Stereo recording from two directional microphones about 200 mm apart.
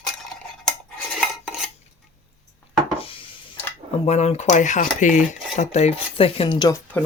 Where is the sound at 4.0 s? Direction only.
30° left (ahead or behind); by 7.0 s 15° left (ahead or behind).